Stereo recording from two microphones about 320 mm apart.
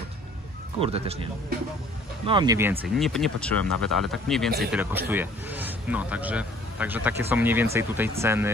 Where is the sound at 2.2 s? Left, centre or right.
Centre.